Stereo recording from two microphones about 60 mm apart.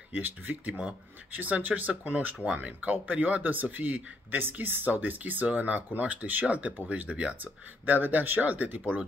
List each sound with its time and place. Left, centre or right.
0.2 s speech: right